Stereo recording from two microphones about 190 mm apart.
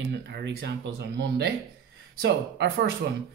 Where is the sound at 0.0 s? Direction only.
60° right (ahead or behind).